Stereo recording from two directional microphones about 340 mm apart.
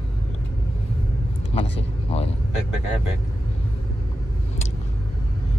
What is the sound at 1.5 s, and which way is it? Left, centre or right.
Speech, centre.